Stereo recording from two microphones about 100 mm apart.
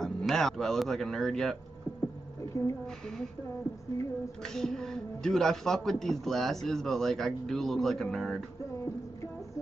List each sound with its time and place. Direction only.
0.0 s speech: 5° left (ahead or behind)
2.5 s a woman's voice: 35° left (ahead or behind)
4.6 s speech: 5° left (ahead or behind)